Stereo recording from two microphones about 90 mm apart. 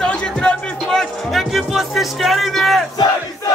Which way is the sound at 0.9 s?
5° left (ahead or behind).